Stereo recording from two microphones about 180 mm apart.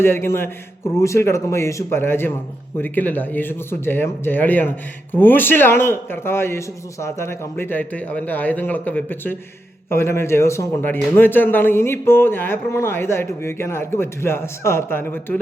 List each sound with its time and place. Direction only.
0.0 s a man's voice: 15° left (ahead or behind)